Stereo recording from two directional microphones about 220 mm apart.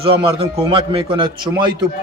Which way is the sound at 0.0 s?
25° right (ahead or behind).